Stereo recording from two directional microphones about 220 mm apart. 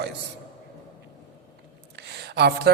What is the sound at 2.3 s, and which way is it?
Speech, 45° right (ahead or behind).